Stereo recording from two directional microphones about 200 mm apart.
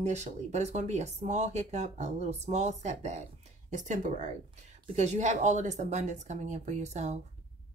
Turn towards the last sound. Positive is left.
turn(degrees=-35)  # may be behind; listen again after turning